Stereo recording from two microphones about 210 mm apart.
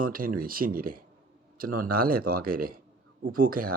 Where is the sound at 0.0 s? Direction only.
40° right (ahead or behind).